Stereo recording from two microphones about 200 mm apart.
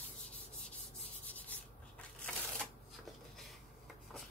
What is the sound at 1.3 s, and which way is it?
Rub, 10° left (ahead or behind).